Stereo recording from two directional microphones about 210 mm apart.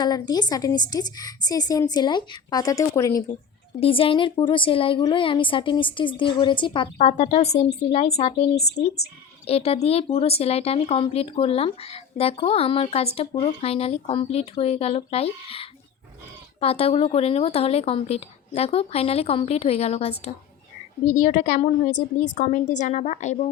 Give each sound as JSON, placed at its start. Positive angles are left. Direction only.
{"t": 0.0, "sound": "speech", "side_deg": 20}
{"t": 3.8, "sound": "a woman's voice", "side_deg": 25}
{"t": 8.5, "sound": "speech", "side_deg": 50}
{"t": 9.5, "sound": "a woman's voice", "side_deg": 30}